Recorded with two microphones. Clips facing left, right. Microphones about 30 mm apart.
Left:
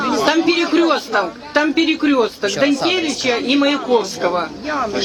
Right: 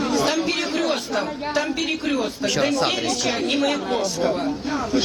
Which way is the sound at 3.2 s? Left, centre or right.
Left.